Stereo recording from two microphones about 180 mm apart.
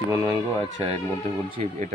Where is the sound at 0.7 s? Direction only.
30° right (ahead or behind).